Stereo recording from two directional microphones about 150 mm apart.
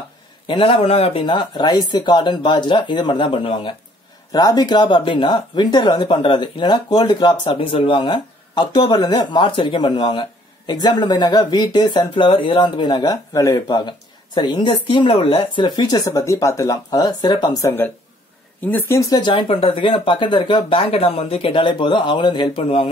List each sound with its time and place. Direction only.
0.5 s speech: 40° left (ahead or behind)